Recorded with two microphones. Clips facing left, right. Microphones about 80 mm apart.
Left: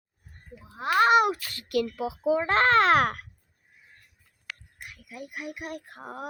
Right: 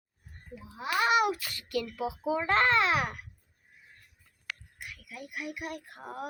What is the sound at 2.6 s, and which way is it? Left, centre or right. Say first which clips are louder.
Speech: left 6 dB; left.